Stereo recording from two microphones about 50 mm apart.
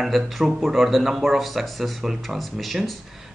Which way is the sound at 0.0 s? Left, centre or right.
Centre.